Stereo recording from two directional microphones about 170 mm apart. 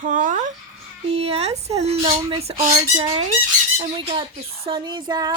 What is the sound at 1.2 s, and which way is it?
Speech, 35° right (ahead or behind).